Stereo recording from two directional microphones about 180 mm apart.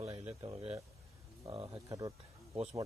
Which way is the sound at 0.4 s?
30° right (ahead or behind).